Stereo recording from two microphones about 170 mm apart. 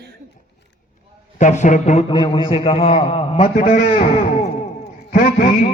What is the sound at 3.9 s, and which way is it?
Speech, 45° left (ahead or behind).